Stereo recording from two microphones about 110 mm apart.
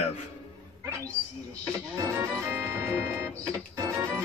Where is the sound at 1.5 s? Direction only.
30° right (ahead or behind).